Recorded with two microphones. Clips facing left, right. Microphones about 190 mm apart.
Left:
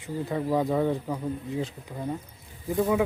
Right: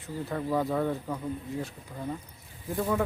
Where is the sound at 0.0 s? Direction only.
15° left (ahead or behind).